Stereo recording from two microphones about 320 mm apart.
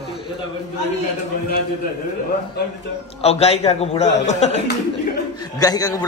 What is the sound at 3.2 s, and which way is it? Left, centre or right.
A man's voice, centre.